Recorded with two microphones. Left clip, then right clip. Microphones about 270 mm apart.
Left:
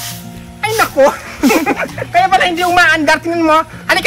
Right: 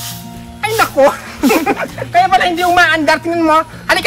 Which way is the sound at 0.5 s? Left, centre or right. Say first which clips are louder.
Even; centre.